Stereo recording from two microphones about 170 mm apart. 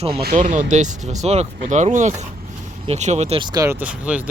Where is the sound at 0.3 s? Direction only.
45° right (ahead or behind).